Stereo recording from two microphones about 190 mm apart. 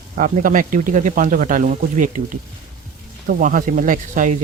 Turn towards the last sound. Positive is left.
turn(degrees=-45)  # may be behind; listen again after turning